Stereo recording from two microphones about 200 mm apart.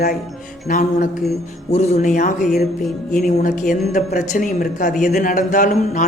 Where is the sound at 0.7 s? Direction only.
40° left (ahead or behind).